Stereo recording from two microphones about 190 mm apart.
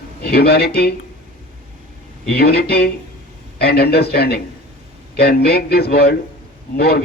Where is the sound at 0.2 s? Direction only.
55° left (ahead or behind).